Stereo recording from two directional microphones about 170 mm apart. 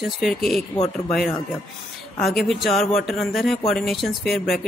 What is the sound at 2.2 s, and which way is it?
Speech, centre (ahead or behind).